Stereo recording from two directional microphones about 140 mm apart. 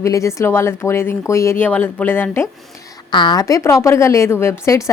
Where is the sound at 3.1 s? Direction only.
35° left (ahead or behind).